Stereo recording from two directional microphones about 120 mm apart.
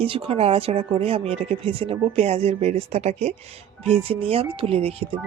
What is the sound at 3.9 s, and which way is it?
Music, 50° right (ahead or behind).